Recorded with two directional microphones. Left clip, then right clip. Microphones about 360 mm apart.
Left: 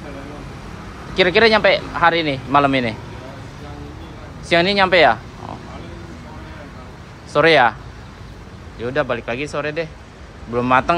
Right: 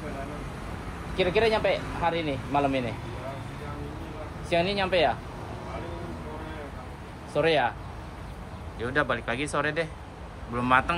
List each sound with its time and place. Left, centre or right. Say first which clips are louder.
1.1 s speech: left 11 dB; left
4.5 s speech: left 11 dB; centre
7.3 s speech: left 11 dB; centre
8.8 s a man's voice: left 6 dB; centre